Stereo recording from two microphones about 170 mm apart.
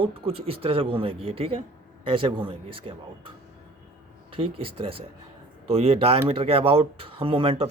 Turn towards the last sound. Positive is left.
turn(degrees=-35)  # may be behind; listen again after turning